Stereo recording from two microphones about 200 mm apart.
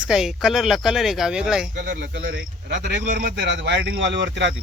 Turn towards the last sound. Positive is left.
turn(degrees=-60)  # may be behind; listen again after turning